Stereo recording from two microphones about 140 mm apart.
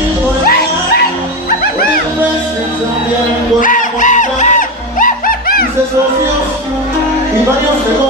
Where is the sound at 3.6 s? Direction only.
70° left (ahead or behind).